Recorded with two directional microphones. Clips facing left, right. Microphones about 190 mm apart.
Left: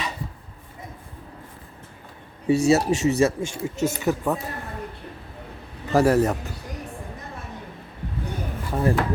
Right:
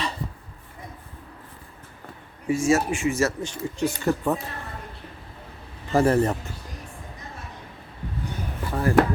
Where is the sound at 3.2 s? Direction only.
20° left (ahead or behind).